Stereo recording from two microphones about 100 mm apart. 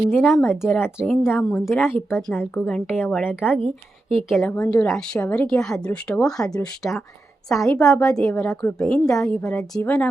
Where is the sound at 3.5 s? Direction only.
65° right (ahead or behind).